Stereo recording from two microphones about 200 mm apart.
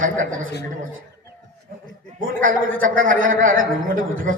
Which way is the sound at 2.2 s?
45° right (ahead or behind).